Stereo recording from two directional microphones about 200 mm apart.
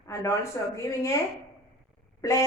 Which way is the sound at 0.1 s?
15° left (ahead or behind).